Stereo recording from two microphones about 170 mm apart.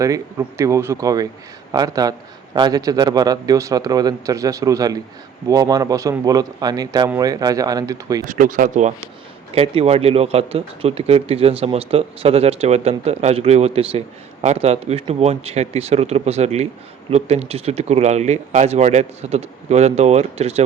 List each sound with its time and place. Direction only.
0.0 s a man's voice: 20° right (ahead or behind)
8.2 s speech: 50° right (ahead or behind)
9.5 s speech: 35° right (ahead or behind)